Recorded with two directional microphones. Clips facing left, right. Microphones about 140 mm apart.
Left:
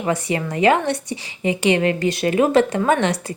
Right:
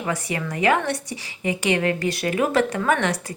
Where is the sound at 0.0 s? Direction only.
25° left (ahead or behind).